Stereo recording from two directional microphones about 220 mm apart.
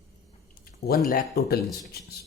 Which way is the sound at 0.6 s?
45° left (ahead or behind).